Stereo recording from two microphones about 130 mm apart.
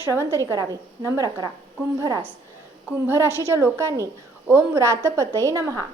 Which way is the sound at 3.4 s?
20° right (ahead or behind).